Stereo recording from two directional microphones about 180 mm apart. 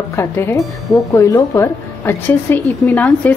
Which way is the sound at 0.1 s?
15° left (ahead or behind).